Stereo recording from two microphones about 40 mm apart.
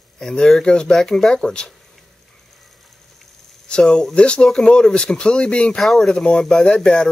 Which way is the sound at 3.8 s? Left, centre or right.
Centre.